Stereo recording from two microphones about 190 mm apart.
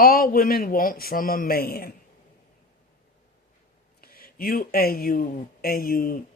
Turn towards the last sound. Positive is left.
turn(degrees=50)  # may be behind; listen again after turning